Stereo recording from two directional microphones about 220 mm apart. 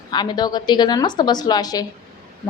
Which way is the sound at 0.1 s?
20° left (ahead or behind).